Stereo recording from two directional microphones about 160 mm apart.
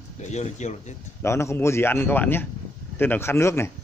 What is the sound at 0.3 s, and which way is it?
Speech, 45° left (ahead or behind).